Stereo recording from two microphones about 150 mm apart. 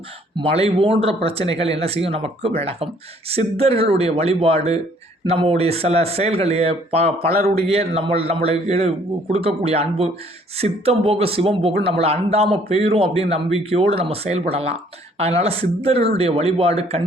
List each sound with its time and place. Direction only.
0.3 s speech: 40° right (ahead or behind)
7.3 s a man's voice: 90° right
7.7 s speech: 40° right (ahead or behind)